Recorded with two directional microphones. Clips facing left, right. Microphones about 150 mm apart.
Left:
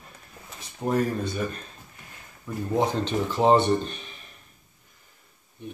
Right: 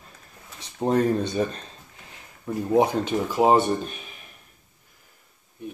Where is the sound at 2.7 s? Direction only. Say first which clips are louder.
Right 4 dB; 10° right (ahead or behind).